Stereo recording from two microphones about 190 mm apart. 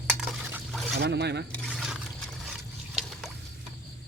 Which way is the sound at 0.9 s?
60° right (ahead or behind).